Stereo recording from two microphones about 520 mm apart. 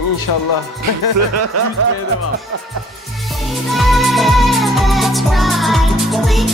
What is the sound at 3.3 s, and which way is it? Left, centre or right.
Music, centre.